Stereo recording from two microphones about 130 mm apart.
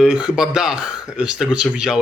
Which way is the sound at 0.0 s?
5° right (ahead or behind).